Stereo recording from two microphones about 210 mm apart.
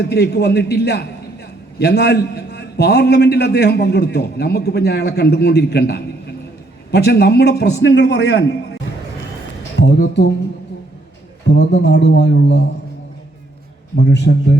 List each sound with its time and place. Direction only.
0.0 s a man's voice: 50° left (ahead or behind)
9.7 s speech: 55° left (ahead or behind)
11.4 s a man's voice: 55° left (ahead or behind)
13.9 s a man's voice: 55° left (ahead or behind)